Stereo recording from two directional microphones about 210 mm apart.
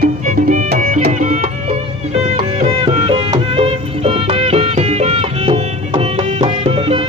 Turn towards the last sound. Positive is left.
turn(degrees=-25)  # may be behind; listen again after turning